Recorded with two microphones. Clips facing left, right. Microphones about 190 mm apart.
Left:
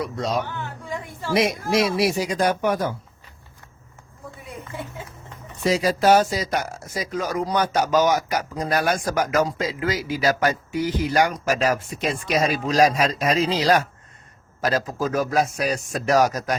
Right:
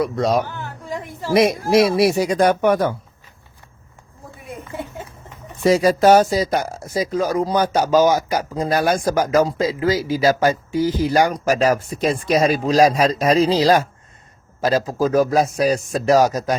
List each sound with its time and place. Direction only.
0.0 s speech: 60° right (ahead or behind)
5.6 s speech: 50° right (ahead or behind); by 16.6 s 25° right (ahead or behind)